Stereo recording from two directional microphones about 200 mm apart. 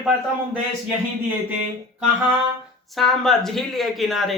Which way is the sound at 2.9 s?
Centre (ahead or behind).